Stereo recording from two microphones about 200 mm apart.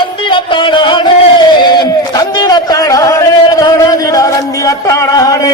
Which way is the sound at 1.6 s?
20° left (ahead or behind).